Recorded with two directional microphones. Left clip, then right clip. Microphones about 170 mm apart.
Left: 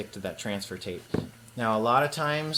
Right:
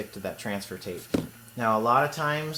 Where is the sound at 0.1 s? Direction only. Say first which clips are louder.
Right 1 dB; 15° left (ahead or behind).